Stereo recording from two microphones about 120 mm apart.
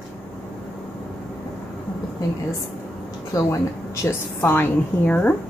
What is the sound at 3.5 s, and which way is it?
A woman's voice, 25° left (ahead or behind).